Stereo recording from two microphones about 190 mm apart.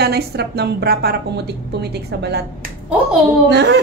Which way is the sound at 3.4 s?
65° right (ahead or behind).